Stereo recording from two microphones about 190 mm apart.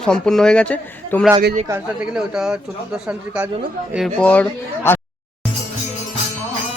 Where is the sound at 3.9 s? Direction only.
Centre (ahead or behind).